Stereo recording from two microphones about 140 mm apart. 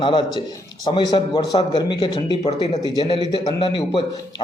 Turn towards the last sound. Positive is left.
turn(degrees=35)  # may be behind; listen again after turning